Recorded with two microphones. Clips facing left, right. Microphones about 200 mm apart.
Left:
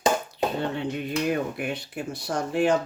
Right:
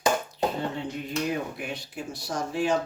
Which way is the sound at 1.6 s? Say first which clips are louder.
Left 4 dB; 60° left (ahead or behind).